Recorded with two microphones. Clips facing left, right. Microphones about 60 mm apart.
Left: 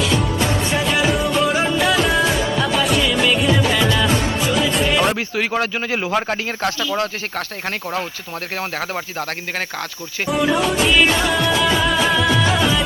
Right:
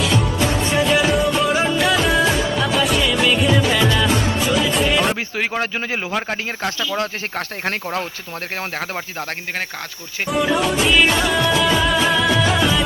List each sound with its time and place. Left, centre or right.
0.7 s music: centre
5.4 s speech: right
10.2 s music: centre